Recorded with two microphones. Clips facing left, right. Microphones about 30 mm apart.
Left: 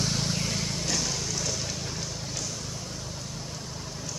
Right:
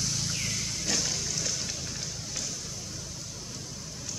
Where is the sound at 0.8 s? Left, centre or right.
Centre.